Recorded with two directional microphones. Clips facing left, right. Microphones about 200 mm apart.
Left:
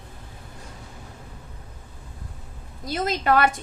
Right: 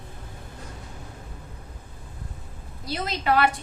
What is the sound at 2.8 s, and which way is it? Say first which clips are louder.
Speech: left 3 dB; 45° left (ahead or behind).